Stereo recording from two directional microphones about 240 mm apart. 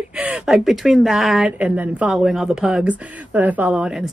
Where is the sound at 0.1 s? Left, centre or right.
Centre.